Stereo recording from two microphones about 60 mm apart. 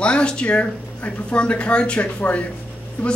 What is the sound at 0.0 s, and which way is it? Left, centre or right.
Speech, centre.